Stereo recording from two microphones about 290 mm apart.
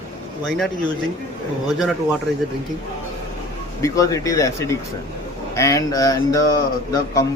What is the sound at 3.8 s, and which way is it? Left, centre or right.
Speech, centre.